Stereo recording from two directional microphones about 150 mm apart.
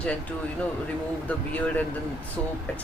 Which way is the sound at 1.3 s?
10° left (ahead or behind).